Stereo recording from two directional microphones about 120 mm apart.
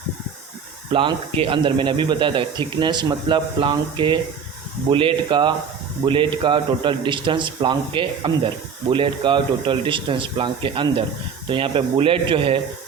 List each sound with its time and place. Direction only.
0.9 s speech: 45° right (ahead or behind)